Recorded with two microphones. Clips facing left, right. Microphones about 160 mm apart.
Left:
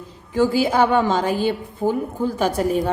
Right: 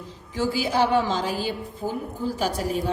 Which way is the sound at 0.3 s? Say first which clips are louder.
Left 6 dB; 50° left (ahead or behind).